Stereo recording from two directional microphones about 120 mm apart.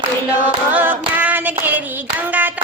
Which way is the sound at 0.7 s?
15° right (ahead or behind).